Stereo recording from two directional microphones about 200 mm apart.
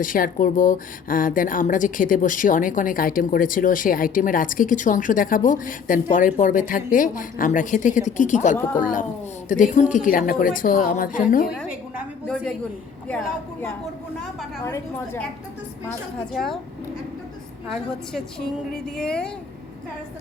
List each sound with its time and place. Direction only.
0.0 s a woman's voice: 45° left (ahead or behind)
13.1 s a woman's voice: 5° left (ahead or behind)
16.3 s speech: centre (ahead or behind)
18.1 s speech: 5° left (ahead or behind)